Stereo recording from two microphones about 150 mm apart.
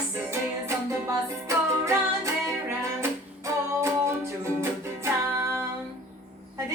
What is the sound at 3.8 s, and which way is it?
Music, 20° right (ahead or behind).